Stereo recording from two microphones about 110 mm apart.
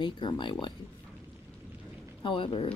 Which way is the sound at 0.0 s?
45° left (ahead or behind).